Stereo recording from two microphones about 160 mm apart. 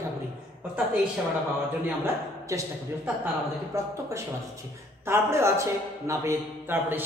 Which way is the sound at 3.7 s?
20° right (ahead or behind).